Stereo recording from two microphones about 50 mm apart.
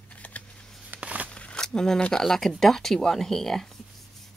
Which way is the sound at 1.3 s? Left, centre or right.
Left.